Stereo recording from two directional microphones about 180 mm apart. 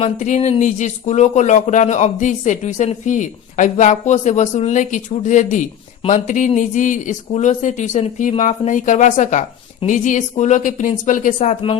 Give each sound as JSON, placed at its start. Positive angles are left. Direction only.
{"t": 0.0, "sound": "speech", "side_deg": 40}